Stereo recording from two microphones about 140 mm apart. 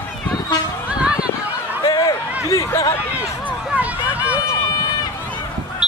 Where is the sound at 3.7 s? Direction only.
10° right (ahead or behind).